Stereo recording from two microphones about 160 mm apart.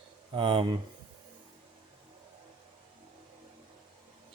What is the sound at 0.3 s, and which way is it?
Speech, 35° right (ahead or behind).